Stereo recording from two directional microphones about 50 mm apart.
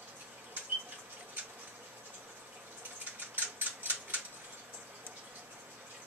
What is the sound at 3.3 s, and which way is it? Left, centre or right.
Typewriter, right.